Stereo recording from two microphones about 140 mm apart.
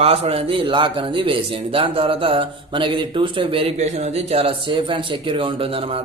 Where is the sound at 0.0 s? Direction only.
45° right (ahead or behind).